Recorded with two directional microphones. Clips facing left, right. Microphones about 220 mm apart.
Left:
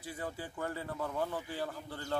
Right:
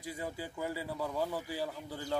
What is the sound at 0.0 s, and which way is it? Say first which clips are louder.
A man's voice: right 1 dB; 10° right (ahead or behind).